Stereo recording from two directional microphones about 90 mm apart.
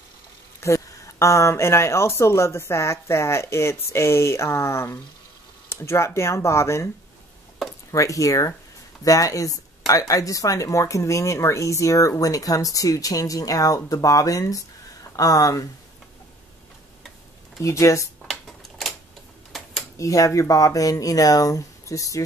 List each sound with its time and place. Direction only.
0.6 s speech: 35° left (ahead or behind)
7.9 s speech: 35° left (ahead or behind)
17.6 s speech: 35° left (ahead or behind)
18.2 s a sound: 5° left (ahead or behind)
20.0 s speech: 35° left (ahead or behind)